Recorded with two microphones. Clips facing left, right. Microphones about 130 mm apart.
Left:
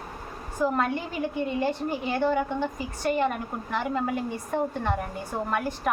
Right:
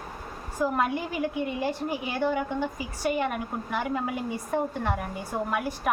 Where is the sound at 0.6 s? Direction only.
5° right (ahead or behind).